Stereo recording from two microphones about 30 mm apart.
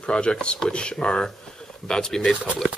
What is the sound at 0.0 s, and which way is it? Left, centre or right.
Speech, left.